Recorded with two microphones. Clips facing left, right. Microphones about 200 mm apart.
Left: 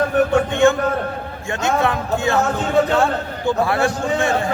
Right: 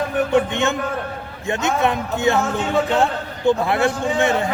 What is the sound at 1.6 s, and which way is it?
A man's voice, 20° right (ahead or behind).